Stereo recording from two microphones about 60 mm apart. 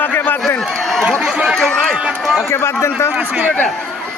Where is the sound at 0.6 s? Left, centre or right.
Centre.